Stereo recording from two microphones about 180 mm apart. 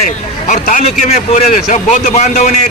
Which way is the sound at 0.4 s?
45° left (ahead or behind).